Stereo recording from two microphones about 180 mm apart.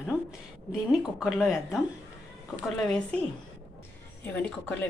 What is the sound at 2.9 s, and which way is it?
Speech, 5° left (ahead or behind).